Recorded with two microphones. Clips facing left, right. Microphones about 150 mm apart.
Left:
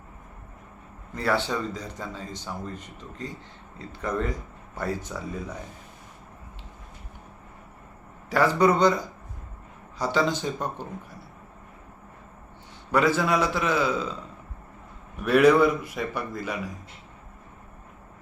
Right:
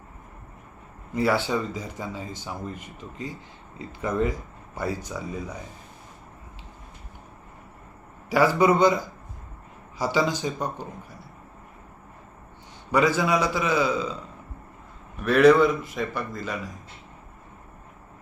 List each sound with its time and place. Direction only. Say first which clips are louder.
1.1 s a man's voice: right 3 dB; 10° right (ahead or behind)
8.3 s a man's voice: right 1 dB; 5° right (ahead or behind)
10.0 s a man's voice: right 1 dB; 5° right (ahead or behind)
12.9 s a man's voice: right 1 dB; centre (ahead or behind)
15.2 s a man's voice: right 1 dB; 5° left (ahead or behind)